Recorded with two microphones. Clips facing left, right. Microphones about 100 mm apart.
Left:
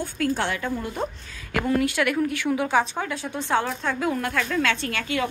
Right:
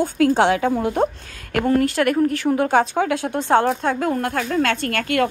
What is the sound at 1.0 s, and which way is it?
Speech, 55° right (ahead or behind).